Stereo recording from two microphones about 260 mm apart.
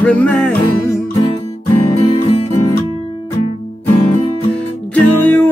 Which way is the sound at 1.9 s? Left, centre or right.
Left.